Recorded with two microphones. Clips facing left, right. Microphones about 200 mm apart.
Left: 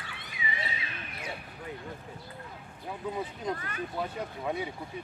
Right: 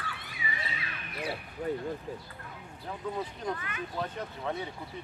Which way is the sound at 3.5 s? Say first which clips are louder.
Left 1 dB; 40° left (ahead or behind).